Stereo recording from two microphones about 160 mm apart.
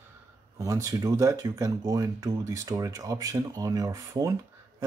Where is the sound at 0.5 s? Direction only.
20° right (ahead or behind).